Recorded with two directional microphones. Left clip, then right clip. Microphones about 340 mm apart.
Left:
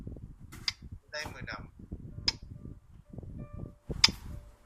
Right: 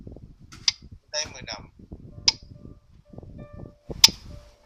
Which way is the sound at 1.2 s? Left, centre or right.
Centre.